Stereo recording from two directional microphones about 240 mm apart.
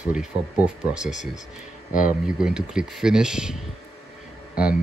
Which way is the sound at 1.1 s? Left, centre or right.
Left.